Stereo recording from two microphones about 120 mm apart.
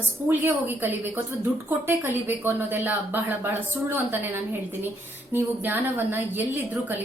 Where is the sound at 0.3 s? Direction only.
15° right (ahead or behind).